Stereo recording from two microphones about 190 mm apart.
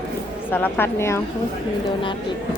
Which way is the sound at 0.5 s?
10° left (ahead or behind).